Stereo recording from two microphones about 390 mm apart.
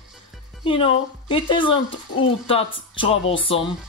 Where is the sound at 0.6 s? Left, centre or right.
Centre.